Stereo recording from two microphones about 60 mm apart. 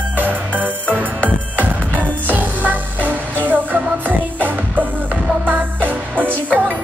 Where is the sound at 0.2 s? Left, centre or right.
Right.